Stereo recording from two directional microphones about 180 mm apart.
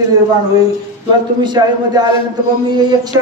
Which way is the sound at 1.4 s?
25° right (ahead or behind).